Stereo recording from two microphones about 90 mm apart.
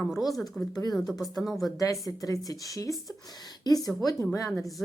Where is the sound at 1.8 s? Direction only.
40° left (ahead or behind).